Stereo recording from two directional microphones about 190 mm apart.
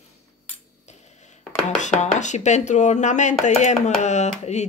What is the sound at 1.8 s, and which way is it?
Speech, 40° left (ahead or behind).